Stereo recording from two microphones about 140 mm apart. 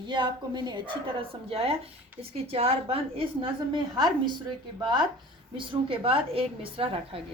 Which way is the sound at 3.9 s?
30° right (ahead or behind).